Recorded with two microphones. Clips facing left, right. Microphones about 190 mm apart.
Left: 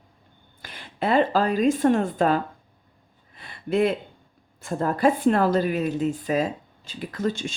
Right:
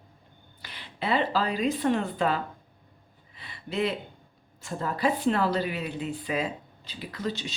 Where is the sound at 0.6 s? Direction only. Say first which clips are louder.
Left 6 dB; 50° left (ahead or behind).